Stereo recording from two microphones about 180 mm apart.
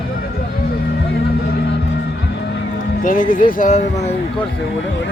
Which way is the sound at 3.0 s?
50° left (ahead or behind).